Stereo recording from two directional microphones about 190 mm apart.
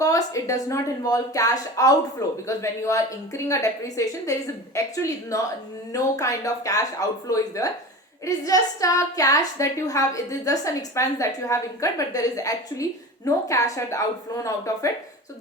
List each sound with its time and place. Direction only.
0.0 s a woman's voice: 15° left (ahead or behind)